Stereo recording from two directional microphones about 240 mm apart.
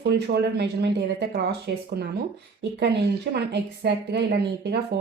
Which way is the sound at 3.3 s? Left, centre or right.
Right.